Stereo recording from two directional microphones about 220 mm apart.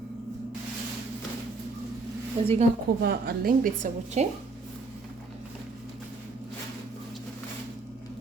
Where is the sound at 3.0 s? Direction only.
45° right (ahead or behind).